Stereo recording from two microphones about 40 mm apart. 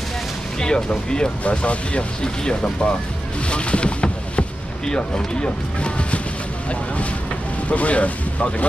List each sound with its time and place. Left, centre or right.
0.6 s speech: left
3.4 s boat: left
7.7 s speech: left